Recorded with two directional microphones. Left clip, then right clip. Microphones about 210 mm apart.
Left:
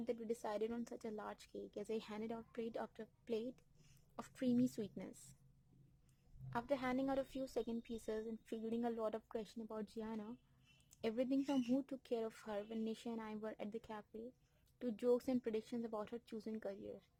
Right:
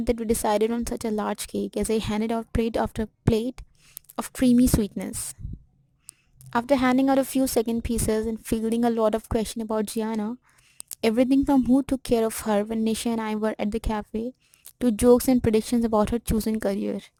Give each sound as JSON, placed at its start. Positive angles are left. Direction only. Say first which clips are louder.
{"t": 0.0, "sound": "a woman's voice", "louder": "right 19 dB", "side_deg": -40}
{"t": 6.5, "sound": "speech", "louder": "right 19 dB", "side_deg": -40}